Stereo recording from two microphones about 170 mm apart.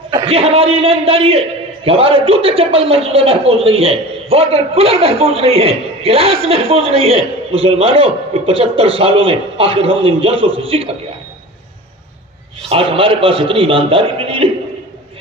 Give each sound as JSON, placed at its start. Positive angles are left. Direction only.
{"t": 0.1, "sound": "a man's voice", "side_deg": -35}
{"t": 12.6, "sound": "a man's voice", "side_deg": -35}